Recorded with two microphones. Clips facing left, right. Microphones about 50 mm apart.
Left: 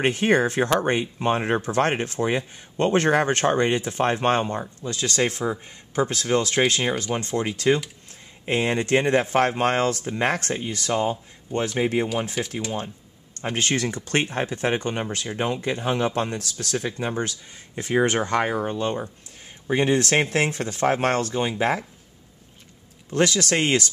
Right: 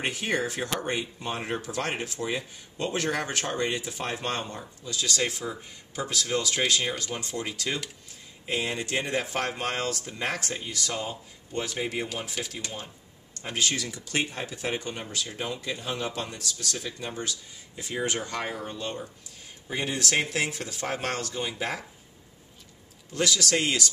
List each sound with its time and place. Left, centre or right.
0.0 s speech: left
7.2 s speech: left
12.4 s speech: centre
13.4 s speech: left
23.1 s speech: left